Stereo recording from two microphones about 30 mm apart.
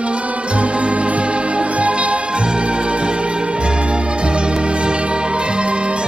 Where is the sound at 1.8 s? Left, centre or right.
Right.